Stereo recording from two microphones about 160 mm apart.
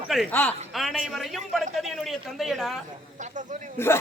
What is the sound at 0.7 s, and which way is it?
A man's voice, centre (ahead or behind).